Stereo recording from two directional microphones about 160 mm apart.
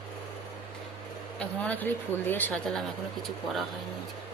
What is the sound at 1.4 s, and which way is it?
A woman's voice, 10° left (ahead or behind).